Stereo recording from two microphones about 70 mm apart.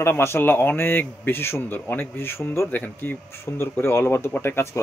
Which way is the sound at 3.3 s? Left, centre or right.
Left.